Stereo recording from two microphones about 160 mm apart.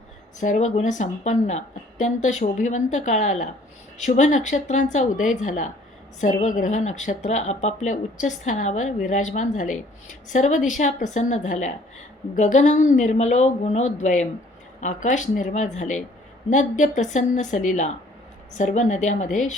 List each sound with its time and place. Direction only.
0.3 s a woman's voice: 50° left (ahead or behind)